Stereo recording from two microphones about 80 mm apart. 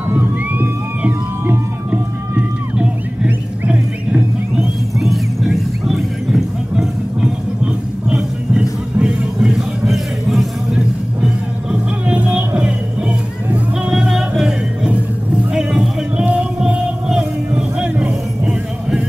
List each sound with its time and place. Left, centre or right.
0.1 s music: right
4.9 s music: centre
11.7 s music: centre
13.8 s music: centre